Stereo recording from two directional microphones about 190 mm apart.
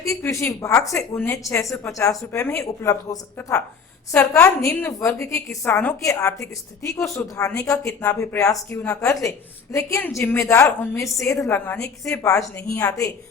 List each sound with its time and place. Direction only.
0.0 s a woman's voice: 15° left (ahead or behind)